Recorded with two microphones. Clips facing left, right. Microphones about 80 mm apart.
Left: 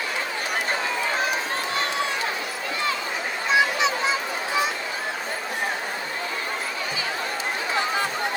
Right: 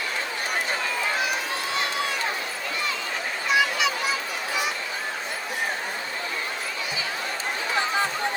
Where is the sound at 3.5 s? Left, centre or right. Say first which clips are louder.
Left 2 dB; left.